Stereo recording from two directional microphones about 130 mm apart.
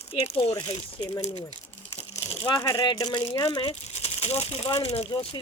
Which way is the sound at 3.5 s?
50° left (ahead or behind).